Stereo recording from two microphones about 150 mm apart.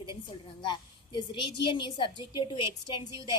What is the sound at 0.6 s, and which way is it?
A woman's voice, 30° left (ahead or behind).